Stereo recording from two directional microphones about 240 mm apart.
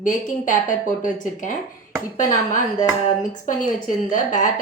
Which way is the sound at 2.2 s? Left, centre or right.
Left.